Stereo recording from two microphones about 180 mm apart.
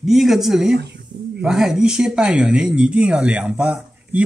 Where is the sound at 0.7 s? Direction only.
70° right (ahead or behind).